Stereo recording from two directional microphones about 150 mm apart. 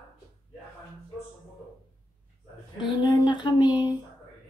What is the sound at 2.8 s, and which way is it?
Female singing, 30° left (ahead or behind).